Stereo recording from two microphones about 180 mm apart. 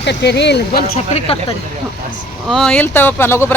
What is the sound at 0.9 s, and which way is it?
Speech, 35° left (ahead or behind).